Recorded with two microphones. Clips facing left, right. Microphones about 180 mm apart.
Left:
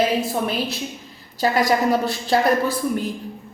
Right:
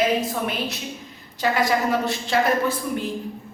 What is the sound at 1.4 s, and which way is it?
A woman's voice, 40° left (ahead or behind).